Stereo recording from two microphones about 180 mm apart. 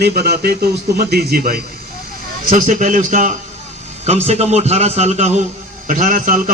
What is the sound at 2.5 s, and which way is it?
A man's voice, 45° right (ahead or behind).